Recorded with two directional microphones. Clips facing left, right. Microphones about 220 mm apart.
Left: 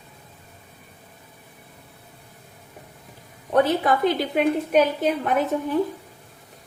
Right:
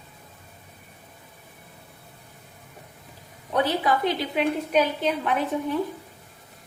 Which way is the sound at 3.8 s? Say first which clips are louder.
Left 3 dB; 50° left (ahead or behind).